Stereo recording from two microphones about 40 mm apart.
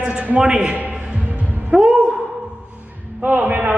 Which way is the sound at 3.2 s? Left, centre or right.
Right.